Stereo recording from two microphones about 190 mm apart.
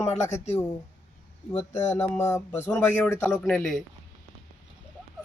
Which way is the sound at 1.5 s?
35° left (ahead or behind).